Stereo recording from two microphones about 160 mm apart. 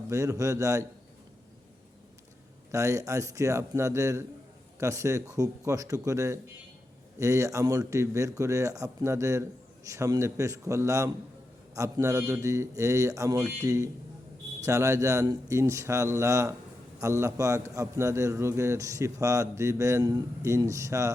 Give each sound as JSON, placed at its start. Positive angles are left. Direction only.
{"t": 0.1, "sound": "a man's voice", "side_deg": -20}
{"t": 2.7, "sound": "a man's voice", "side_deg": -20}